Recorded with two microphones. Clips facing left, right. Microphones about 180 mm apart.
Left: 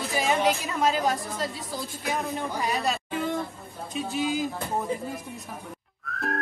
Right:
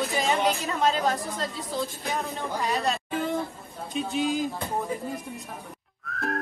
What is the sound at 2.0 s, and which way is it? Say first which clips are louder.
Speech: left 1 dB; 15° left (ahead or behind).